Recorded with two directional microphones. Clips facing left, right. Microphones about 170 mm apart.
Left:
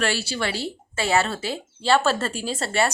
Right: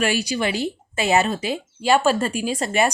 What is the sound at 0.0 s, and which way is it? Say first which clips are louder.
Speech: right 4 dB; 15° right (ahead or behind).